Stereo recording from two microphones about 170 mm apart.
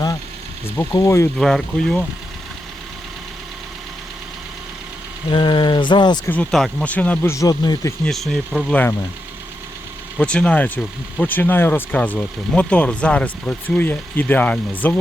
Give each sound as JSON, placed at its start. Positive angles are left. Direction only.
{"t": 0.8, "sound": "speech", "side_deg": 15}
{"t": 1.4, "sound": "speech", "side_deg": 0}
{"t": 5.3, "sound": "speech", "side_deg": 25}
{"t": 6.2, "sound": "speech", "side_deg": 5}
{"t": 8.0, "sound": "speech", "side_deg": 0}
{"t": 10.2, "sound": "speech", "side_deg": 5}